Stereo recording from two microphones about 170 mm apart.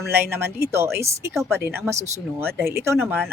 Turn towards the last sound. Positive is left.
turn(degrees=-10)  # may be behind; listen again after turning